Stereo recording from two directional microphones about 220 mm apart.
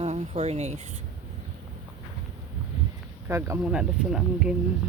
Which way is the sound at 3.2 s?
10° right (ahead or behind).